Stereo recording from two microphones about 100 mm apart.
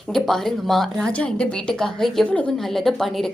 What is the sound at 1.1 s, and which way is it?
A woman's voice, 10° left (ahead or behind).